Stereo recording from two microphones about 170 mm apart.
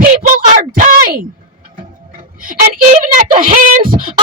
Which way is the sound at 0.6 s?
50° right (ahead or behind).